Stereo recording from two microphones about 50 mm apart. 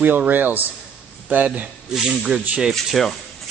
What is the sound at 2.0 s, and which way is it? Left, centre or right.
Speech, centre.